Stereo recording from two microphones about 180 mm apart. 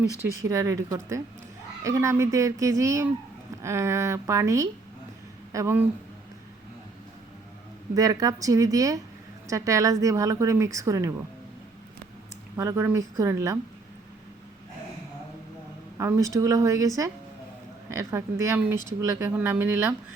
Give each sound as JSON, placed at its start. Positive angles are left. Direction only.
{"t": 0.4, "sound": "speech", "side_deg": -15}
{"t": 7.9, "sound": "speech", "side_deg": -20}
{"t": 12.5, "sound": "speech", "side_deg": -15}
{"t": 16.0, "sound": "speech", "side_deg": -15}